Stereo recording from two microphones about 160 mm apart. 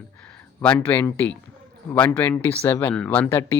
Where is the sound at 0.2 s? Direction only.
5° left (ahead or behind).